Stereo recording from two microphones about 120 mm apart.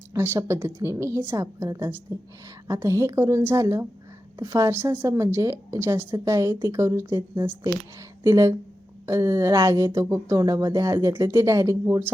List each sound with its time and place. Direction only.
0.1 s speech: 25° right (ahead or behind)